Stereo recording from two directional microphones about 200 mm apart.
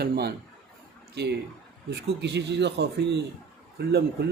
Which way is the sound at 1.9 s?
60° right (ahead or behind).